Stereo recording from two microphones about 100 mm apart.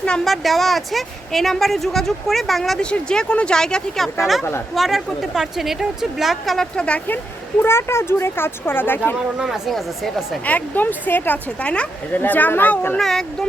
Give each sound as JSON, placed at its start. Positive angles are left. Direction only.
{"t": 0.0, "sound": "a woman's voice", "side_deg": 10}
{"t": 7.6, "sound": "speech", "side_deg": 25}
{"t": 9.4, "sound": "a woman's voice", "side_deg": 0}
{"t": 10.4, "sound": "speech", "side_deg": 15}
{"t": 13.0, "sound": "a woman's voice", "side_deg": 5}